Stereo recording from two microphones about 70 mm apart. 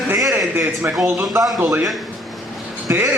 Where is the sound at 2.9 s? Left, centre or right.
Right.